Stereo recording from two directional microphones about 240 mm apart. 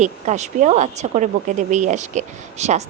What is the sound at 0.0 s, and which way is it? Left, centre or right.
Speech, right.